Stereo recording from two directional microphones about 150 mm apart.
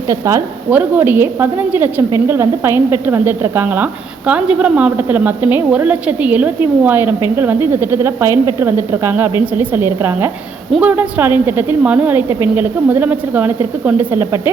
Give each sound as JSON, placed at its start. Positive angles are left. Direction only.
{"t": 0.1, "sound": "a woman's voice", "side_deg": -20}